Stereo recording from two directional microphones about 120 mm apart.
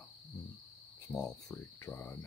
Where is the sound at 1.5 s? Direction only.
20° left (ahead or behind).